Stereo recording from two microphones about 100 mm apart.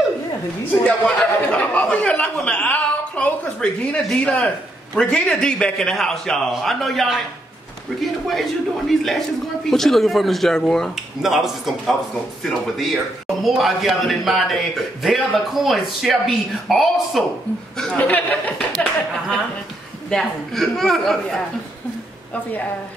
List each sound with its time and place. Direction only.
0.8 s speech: 15° left (ahead or behind)
8.3 s speech: centre (ahead or behind)
17.7 s speech: 15° left (ahead or behind)
20.1 s speech: 5° left (ahead or behind)
22.3 s speech: 15° left (ahead or behind)